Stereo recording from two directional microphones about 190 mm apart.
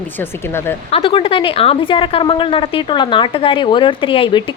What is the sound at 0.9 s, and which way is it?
A woman's voice, 30° left (ahead or behind).